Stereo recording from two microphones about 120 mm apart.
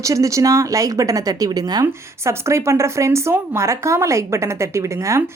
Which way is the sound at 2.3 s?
25° right (ahead or behind).